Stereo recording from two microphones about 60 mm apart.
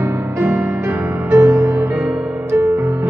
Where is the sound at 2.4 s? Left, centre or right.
Right.